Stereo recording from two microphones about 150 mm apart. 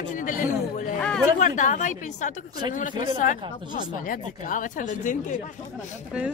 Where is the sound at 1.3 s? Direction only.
55° left (ahead or behind).